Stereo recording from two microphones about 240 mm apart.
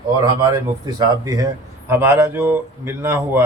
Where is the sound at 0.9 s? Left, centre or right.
Centre.